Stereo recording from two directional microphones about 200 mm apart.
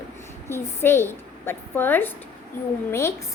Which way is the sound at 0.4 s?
10° left (ahead or behind).